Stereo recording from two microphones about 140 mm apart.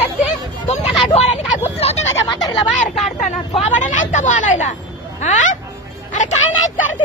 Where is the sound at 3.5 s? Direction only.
55° left (ahead or behind).